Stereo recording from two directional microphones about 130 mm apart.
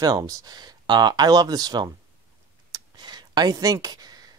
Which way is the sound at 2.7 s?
35° right (ahead or behind).